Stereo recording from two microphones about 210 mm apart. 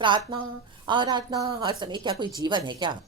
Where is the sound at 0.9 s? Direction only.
20° right (ahead or behind).